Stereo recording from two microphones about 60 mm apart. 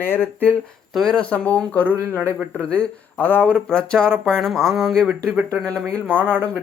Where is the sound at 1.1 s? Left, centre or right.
Left.